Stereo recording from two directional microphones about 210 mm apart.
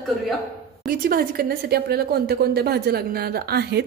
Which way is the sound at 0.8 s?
45° right (ahead or behind).